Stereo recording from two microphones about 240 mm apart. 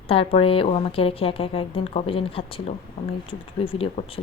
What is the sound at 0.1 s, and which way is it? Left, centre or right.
A woman's voice, left.